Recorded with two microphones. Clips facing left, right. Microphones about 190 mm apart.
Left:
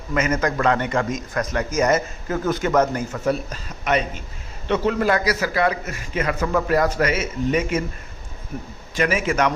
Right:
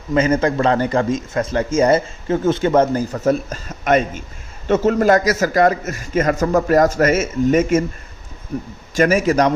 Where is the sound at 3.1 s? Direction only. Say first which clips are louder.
Right 5 dB; 45° right (ahead or behind).